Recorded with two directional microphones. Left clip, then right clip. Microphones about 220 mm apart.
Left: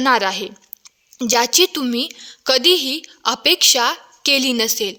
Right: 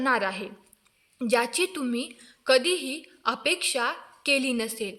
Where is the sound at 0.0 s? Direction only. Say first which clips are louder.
Left 9 dB; 50° left (ahead or behind).